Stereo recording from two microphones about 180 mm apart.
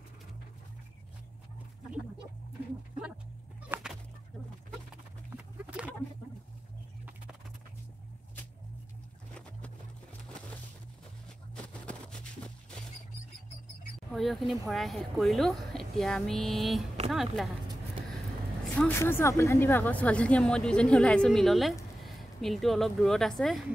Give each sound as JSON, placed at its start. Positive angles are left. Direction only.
{"t": 3.6, "sound": "fowl", "side_deg": -5}
{"t": 5.7, "sound": "chicken", "side_deg": -5}
{"t": 11.5, "sound": "a sound", "side_deg": 5}
{"t": 14.1, "sound": "speech", "side_deg": 0}
{"t": 18.8, "sound": "speech", "side_deg": 10}